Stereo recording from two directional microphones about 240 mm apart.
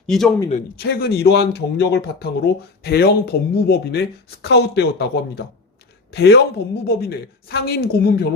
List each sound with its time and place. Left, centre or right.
0.1 s a man's voice: centre
0.5 s speech: left